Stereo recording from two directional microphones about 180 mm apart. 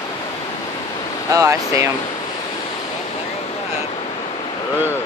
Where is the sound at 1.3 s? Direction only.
15° right (ahead or behind).